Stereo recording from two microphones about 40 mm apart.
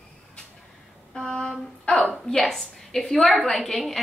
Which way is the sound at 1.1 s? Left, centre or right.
Centre.